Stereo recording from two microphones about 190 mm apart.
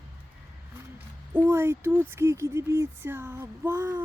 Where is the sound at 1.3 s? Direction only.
10° right (ahead or behind).